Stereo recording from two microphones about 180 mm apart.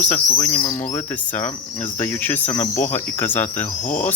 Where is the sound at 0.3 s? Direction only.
15° left (ahead or behind).